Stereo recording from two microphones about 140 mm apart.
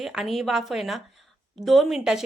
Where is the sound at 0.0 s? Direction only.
5° right (ahead or behind).